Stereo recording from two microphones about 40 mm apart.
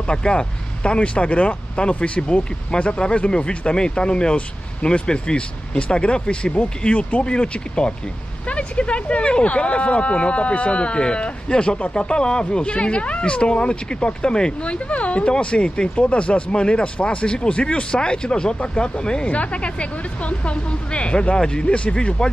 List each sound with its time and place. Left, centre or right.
0.1 s speech: left
19.2 s speech: left